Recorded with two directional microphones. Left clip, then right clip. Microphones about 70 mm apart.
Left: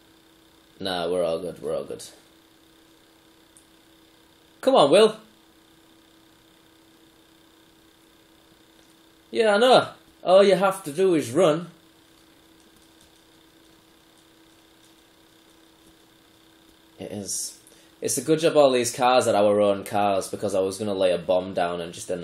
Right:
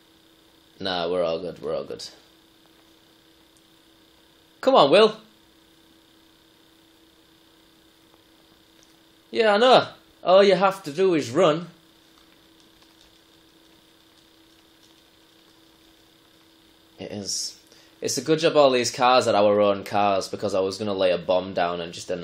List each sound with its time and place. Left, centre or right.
0.7 s speech: centre
4.6 s speech: centre
9.3 s speech: centre
17.0 s speech: left